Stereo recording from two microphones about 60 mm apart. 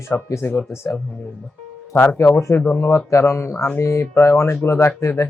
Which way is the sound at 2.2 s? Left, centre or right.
Left.